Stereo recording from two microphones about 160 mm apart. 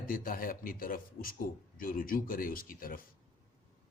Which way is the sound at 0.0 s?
60° left (ahead or behind).